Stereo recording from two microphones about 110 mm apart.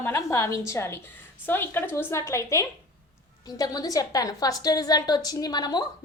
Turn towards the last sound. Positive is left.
turn(degrees=40)  # may be behind; listen again after turning